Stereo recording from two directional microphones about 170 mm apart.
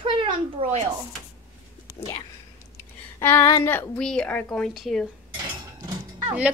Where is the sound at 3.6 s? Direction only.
10° left (ahead or behind).